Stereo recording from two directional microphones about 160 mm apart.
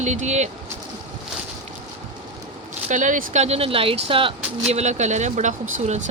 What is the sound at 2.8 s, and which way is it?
Speech, 50° right (ahead or behind).